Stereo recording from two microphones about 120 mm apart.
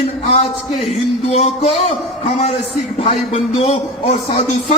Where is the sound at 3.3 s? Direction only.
75° left (ahead or behind).